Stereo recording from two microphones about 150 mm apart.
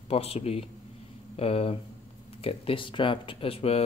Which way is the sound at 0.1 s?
40° left (ahead or behind).